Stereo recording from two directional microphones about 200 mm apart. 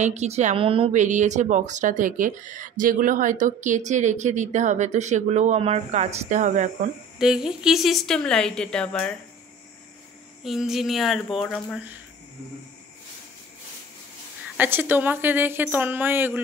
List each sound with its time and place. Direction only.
0.0 s speech: 35° right (ahead or behind)
7.2 s a woman's voice: 5° right (ahead or behind)
10.4 s a woman's voice: centre (ahead or behind)
14.6 s speech: 10° right (ahead or behind)